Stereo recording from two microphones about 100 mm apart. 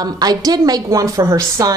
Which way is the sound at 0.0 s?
40° right (ahead or behind).